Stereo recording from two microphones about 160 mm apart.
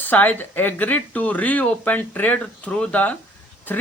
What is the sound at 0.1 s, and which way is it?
Speech, 10° left (ahead or behind).